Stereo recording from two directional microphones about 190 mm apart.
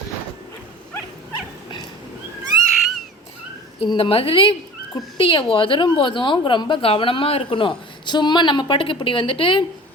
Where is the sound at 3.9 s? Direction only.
30° left (ahead or behind).